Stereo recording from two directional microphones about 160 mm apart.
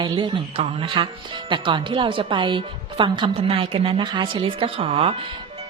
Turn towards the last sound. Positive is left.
turn(degrees=-35)  # may be behind; listen again after turning